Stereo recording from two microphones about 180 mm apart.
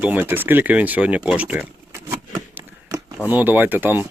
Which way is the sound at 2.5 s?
20° right (ahead or behind).